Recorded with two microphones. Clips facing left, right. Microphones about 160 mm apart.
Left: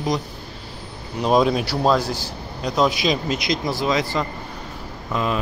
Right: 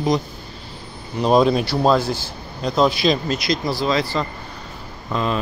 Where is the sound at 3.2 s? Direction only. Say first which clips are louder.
Right 1 dB; 20° left (ahead or behind).